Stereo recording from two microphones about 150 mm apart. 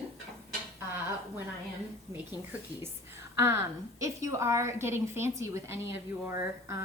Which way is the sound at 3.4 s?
15° right (ahead or behind).